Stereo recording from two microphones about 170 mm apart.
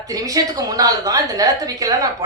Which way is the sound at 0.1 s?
20° right (ahead or behind).